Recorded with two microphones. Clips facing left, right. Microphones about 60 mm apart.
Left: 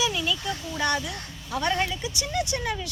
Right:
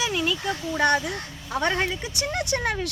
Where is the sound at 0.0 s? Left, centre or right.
Right.